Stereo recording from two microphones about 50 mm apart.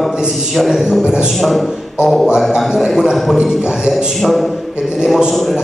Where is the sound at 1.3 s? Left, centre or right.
Centre.